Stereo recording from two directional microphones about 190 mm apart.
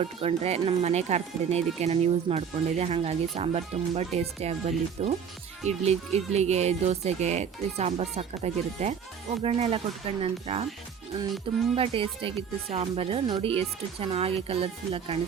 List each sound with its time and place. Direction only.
0.0 s speech: 30° right (ahead or behind)
11.7 s speech: 30° right (ahead or behind)